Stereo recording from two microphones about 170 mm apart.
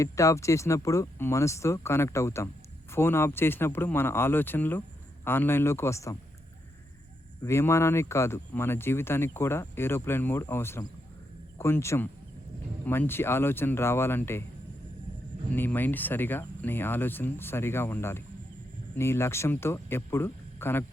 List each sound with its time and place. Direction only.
0.0 s speech: 20° left (ahead or behind)
7.4 s speech: 15° left (ahead or behind)
15.5 s speech: 10° left (ahead or behind)